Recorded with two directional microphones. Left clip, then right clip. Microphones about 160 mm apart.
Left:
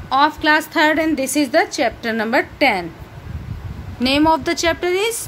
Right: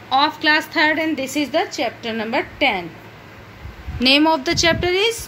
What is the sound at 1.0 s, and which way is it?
A woman's voice, 20° left (ahead or behind).